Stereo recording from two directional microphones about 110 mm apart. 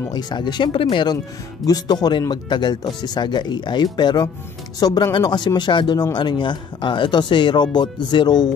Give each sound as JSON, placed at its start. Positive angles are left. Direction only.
{"t": 0.1, "sound": "speech", "side_deg": 40}
{"t": 1.7, "sound": "speech", "side_deg": 40}